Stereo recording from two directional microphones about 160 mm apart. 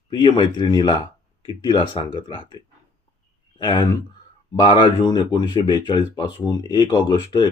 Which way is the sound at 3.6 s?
30° left (ahead or behind).